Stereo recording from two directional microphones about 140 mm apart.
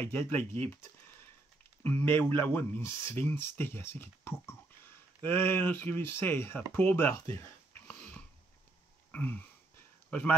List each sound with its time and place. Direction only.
0.0 s speech: 15° left (ahead or behind)
1.8 s speech: 15° left (ahead or behind)
7.3 s sniff: 15° left (ahead or behind)
9.1 s a sound: 15° left (ahead or behind)